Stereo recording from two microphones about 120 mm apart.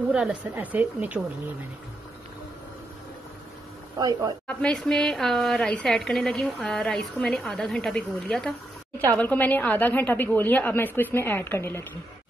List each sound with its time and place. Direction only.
0.1 s speech: 10° right (ahead or behind)
4.0 s speech: 30° right (ahead or behind)
4.5 s a woman's voice: 5° left (ahead or behind)